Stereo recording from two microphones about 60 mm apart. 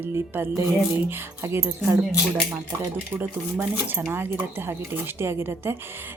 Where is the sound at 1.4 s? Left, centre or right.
Right.